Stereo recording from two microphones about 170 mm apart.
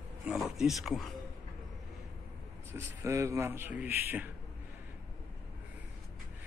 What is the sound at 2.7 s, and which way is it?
Speech, 15° right (ahead or behind).